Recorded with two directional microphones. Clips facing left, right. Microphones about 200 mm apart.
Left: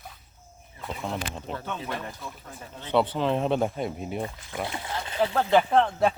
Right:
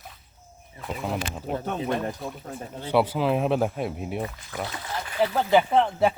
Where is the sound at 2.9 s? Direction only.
10° right (ahead or behind).